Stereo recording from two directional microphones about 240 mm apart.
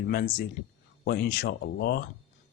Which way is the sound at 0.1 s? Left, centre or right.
Left.